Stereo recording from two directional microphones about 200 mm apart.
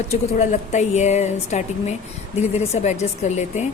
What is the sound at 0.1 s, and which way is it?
Speech, 35° left (ahead or behind).